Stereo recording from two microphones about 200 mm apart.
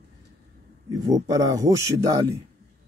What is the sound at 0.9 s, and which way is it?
Speech, 20° right (ahead or behind).